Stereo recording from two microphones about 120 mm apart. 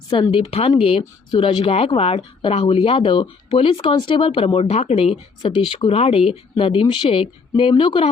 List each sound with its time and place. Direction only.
0.1 s speech: 50° left (ahead or behind)
1.3 s speech: 40° left (ahead or behind)
1.7 s speech: 55° left (ahead or behind)